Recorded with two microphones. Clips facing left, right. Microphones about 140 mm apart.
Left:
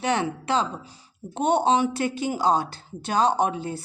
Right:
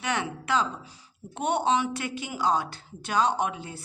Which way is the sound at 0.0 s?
30° left (ahead or behind).